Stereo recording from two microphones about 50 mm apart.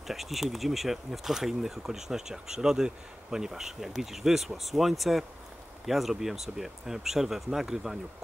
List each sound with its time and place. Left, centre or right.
0.0 s speech: centre